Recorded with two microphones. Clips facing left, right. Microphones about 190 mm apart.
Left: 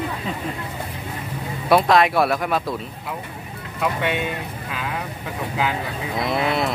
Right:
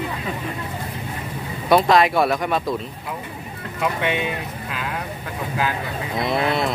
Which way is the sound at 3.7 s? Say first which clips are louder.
Even; centre (ahead or behind).